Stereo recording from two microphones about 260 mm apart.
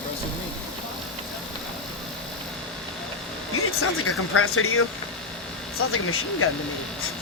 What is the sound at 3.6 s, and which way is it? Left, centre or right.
Speech, left.